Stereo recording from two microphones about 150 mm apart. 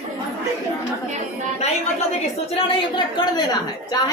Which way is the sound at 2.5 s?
35° left (ahead or behind).